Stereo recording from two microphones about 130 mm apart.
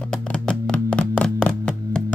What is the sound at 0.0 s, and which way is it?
Music, 10° left (ahead or behind).